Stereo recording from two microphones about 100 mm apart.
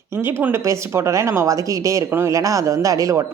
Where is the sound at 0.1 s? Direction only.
25° right (ahead or behind).